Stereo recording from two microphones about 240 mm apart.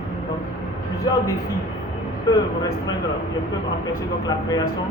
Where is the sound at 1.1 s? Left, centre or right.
Centre.